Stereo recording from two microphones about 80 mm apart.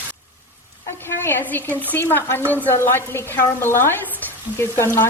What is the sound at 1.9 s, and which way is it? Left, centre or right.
A woman's voice, left.